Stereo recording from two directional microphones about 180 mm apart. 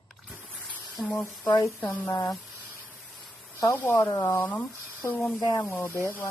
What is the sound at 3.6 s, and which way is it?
Speech, 15° left (ahead or behind).